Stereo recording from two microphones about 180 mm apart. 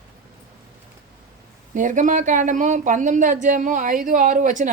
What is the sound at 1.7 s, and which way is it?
A woman's voice, 45° right (ahead or behind).